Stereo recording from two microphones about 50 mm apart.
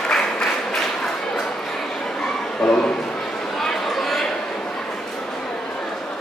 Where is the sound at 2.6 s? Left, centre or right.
Centre.